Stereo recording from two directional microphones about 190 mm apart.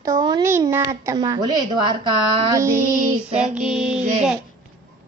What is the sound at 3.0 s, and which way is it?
Child singing, 40° right (ahead or behind).